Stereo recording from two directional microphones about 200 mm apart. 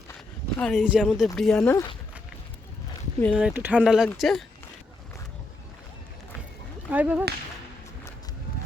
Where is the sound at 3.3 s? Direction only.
5° right (ahead or behind).